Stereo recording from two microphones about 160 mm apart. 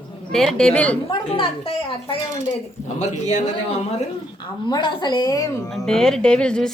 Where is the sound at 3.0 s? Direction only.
50° left (ahead or behind).